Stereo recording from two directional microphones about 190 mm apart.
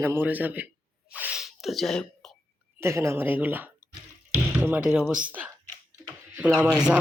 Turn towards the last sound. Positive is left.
turn(degrees=-5)  # may be behind; listen again after turning